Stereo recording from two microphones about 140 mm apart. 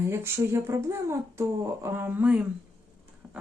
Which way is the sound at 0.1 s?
15° right (ahead or behind).